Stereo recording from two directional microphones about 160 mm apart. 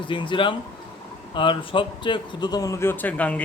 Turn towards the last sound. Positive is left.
turn(degrees=10)  # may be behind; listen again after turning